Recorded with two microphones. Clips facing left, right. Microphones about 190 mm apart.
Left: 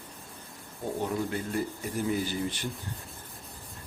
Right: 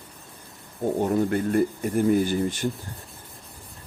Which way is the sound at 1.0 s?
55° right (ahead or behind).